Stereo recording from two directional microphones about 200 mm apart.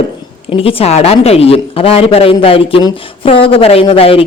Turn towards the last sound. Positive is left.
turn(degrees=30)  # may be behind; listen again after turning